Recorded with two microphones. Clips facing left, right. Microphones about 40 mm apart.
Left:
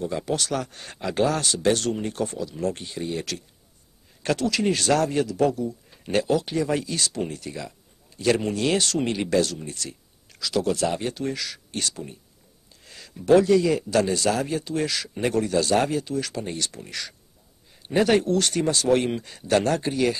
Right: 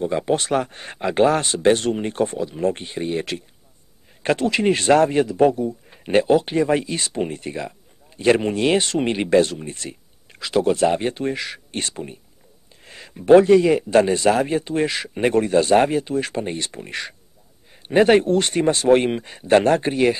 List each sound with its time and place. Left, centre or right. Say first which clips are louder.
0.0 s a man's voice: right 6 dB; right